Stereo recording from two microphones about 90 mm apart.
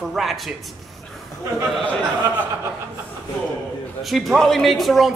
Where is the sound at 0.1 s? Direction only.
Centre (ahead or behind).